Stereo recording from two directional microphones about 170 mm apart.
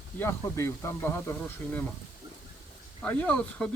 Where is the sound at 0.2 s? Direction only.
15° left (ahead or behind).